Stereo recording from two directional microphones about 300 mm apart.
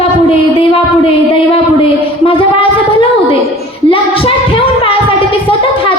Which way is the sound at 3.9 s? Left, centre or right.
Centre.